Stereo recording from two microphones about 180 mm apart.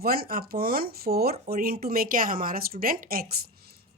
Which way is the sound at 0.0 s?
55° right (ahead or behind).